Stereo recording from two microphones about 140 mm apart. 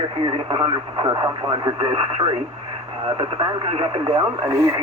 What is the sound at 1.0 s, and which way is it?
Speech, 30° right (ahead or behind).